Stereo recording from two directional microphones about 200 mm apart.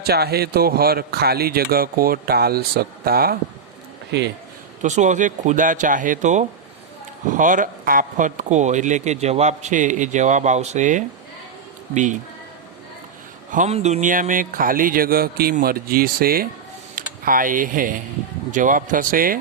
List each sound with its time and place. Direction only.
0.0 s a man's voice: 50° right (ahead or behind)
4.8 s speech: 35° right (ahead or behind)
13.5 s a man's voice: 35° right (ahead or behind)